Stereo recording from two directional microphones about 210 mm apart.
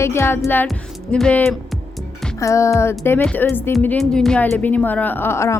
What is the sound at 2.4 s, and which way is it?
Speech, 15° left (ahead or behind).